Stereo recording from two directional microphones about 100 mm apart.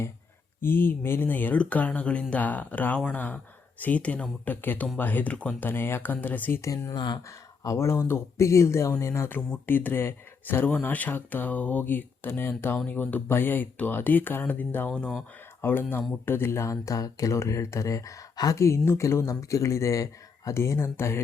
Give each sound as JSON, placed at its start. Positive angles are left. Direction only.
{"t": 0.6, "sound": "speech", "side_deg": 20}
{"t": 6.6, "sound": "speech", "side_deg": 30}
{"t": 6.9, "sound": "speech", "side_deg": 45}
{"t": 7.3, "sound": "speech", "side_deg": 30}
{"t": 15.6, "sound": "speech", "side_deg": 20}